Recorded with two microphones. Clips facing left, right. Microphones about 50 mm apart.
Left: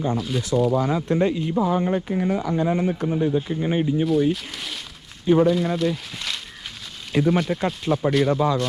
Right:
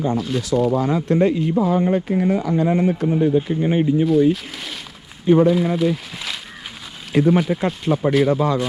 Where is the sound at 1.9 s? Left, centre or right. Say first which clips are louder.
Right 4 dB; right.